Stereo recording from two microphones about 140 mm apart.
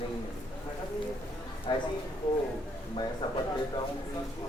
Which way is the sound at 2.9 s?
35° left (ahead or behind).